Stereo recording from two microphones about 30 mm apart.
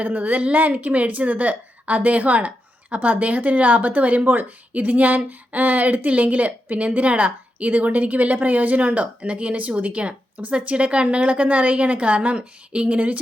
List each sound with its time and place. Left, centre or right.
0.0 s a woman's voice: right
0.3 s a woman's voice: right
6.1 s a woman's voice: right